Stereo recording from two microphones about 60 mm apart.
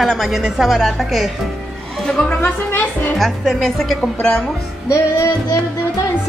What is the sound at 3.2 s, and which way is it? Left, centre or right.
Speech, centre.